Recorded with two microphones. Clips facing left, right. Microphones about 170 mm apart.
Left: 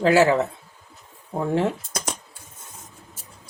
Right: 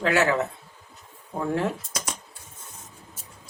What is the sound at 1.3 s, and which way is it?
Speech, 10° left (ahead or behind).